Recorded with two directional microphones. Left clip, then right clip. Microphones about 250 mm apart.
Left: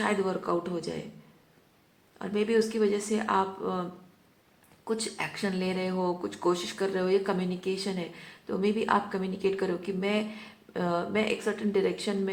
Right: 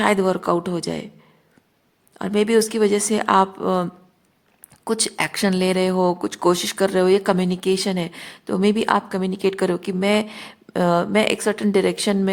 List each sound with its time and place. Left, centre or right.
0.0 s speech: right
2.1 s speech: right
4.9 s speech: right